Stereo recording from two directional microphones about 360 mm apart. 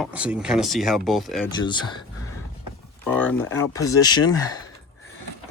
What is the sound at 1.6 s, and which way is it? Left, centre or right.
Speech, centre.